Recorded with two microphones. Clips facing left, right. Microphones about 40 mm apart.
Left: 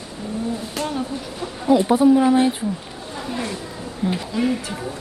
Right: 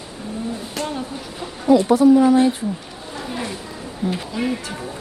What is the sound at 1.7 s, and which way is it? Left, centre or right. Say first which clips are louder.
Speech: right 2 dB; centre.